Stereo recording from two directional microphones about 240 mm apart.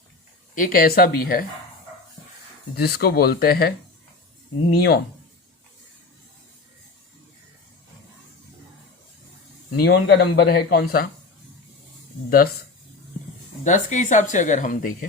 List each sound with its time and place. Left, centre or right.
0.5 s speech: left
2.7 s speech: left
4.7 s speech: left
9.7 s speech: left
13.7 s speech: left